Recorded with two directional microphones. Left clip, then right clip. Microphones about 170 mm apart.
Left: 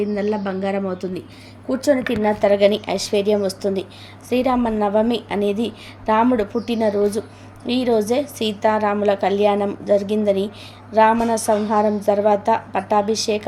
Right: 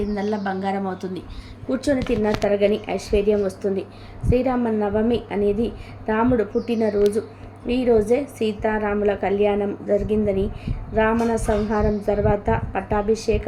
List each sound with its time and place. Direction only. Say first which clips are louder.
0.2 s speech: left 3 dB; 10° left (ahead or behind)
1.7 s a woman's voice: left 3 dB; 25° left (ahead or behind)
12.4 s a woman's voice: left 4 dB; 20° left (ahead or behind)